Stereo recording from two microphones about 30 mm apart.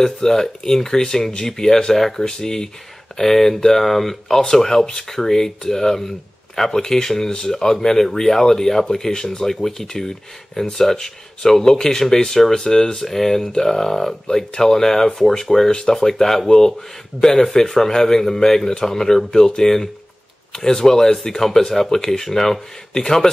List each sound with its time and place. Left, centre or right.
0.0 s speech: centre
3.2 s speech: centre